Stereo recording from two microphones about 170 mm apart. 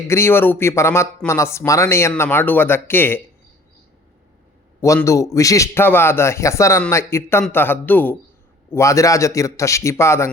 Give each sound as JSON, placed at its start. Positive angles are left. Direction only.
{"t": 0.1, "sound": "speech", "side_deg": 15}
{"t": 4.8, "sound": "speech", "side_deg": 15}